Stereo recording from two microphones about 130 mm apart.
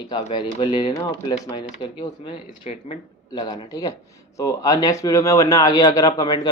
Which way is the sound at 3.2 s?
35° left (ahead or behind).